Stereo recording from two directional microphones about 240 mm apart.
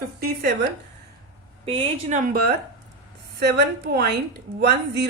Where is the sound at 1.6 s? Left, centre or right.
Right.